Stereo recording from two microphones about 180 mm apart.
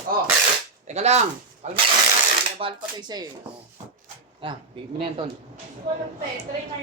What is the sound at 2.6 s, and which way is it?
Speech, 25° right (ahead or behind).